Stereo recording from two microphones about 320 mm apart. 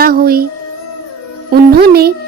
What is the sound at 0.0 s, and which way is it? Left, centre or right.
Speech, right.